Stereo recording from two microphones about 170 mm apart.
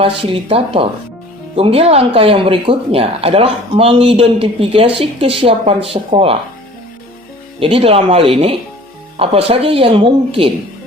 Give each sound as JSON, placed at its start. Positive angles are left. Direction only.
{"t": 0.0, "sound": "speech", "side_deg": -30}
{"t": 7.6, "sound": "speech", "side_deg": -35}